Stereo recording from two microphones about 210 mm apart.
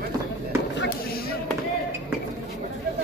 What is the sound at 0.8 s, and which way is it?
Basketball bounce, 45° left (ahead or behind).